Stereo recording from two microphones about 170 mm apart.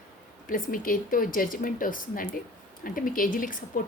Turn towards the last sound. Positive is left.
turn(degrees=55)  # may be behind; listen again after turning